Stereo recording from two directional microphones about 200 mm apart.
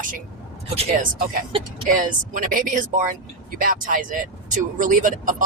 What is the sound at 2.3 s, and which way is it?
Speech, 45° right (ahead or behind).